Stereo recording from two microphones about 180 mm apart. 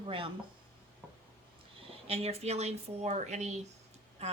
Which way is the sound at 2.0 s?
35° right (ahead or behind).